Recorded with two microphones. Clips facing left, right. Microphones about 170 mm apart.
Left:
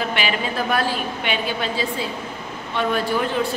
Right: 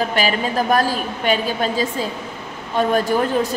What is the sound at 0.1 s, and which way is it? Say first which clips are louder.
A woman's voice: right 4 dB; 40° right (ahead or behind).